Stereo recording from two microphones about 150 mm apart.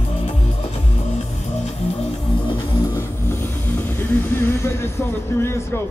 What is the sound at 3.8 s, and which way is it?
Music, 15° left (ahead or behind).